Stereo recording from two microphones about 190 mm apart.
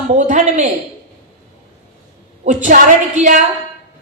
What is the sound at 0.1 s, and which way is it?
Speech, 40° right (ahead or behind).